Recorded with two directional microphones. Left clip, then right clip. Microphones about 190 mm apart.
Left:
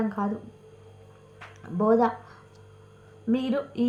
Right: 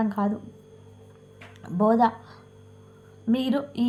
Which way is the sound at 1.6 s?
30° right (ahead or behind).